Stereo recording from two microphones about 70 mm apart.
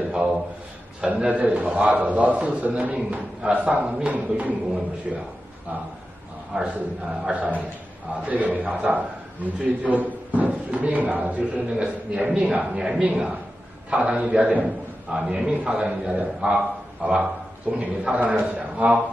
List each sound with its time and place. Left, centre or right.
0.1 s a sound: centre
1.0 s a man's voice: centre
5.1 s a man's voice: centre
6.5 s a man's voice: centre